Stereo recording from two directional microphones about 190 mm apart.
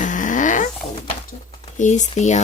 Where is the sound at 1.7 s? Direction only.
40° left (ahead or behind).